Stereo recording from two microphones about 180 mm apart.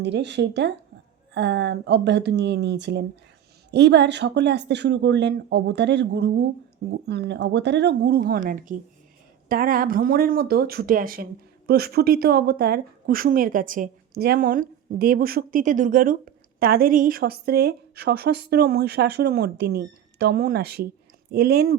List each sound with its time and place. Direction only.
0.0 s speech: 70° right (ahead or behind)